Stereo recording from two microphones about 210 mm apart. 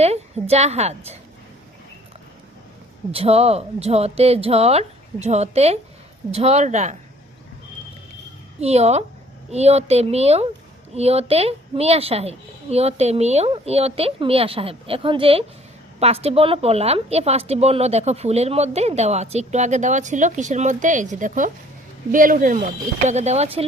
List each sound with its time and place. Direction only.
0.0 s speech: 30° right (ahead or behind)
3.1 s a woman's voice: 30° right (ahead or behind)
8.6 s a woman's voice: 30° right (ahead or behind)